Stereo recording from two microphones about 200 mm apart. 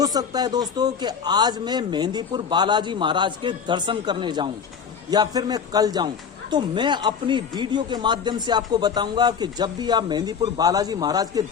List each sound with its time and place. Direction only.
0.0 s speech: 20° right (ahead or behind)